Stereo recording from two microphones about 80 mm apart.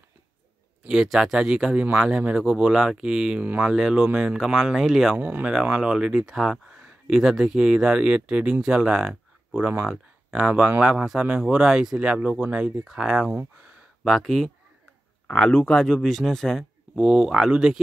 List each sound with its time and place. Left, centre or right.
0.8 s speech: centre
5.1 s speech: centre
15.2 s speech: centre
16.9 s speech: centre